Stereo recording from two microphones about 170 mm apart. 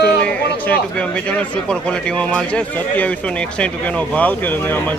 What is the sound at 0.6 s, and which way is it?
Speech, 10° left (ahead or behind).